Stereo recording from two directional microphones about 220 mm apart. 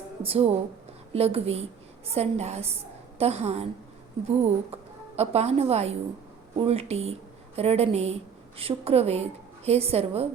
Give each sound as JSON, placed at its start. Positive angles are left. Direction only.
{"t": 0.2, "sound": "a woman's voice", "side_deg": -25}